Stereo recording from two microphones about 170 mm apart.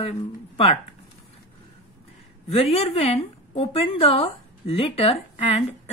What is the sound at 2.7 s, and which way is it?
A woman's voice, 35° left (ahead or behind).